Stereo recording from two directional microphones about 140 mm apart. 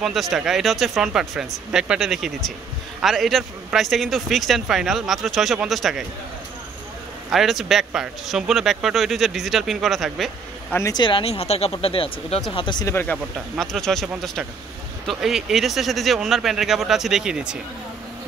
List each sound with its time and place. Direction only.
0.0 s a man's voice: centre (ahead or behind)
7.2 s a man's voice: centre (ahead or behind)
10.9 s speech: 35° left (ahead or behind)
12.8 s speech: 15° left (ahead or behind)
13.6 s a man's voice: 5° left (ahead or behind)